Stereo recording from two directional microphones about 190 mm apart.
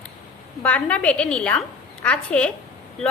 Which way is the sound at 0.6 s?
5° left (ahead or behind).